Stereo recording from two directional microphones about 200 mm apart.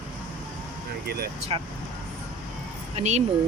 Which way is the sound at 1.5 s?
25° right (ahead or behind).